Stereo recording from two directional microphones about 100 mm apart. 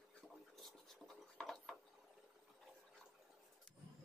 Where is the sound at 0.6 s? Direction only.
5° left (ahead or behind).